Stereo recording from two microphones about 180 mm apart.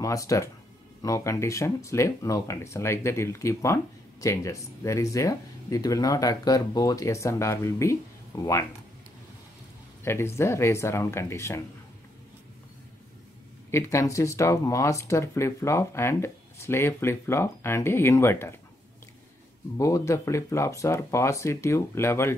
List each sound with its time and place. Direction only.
0.0 s speech: 20° left (ahead or behind)
10.0 s speech: 15° left (ahead or behind)
13.7 s speech: 15° left (ahead or behind)
19.8 s speech: 15° left (ahead or behind)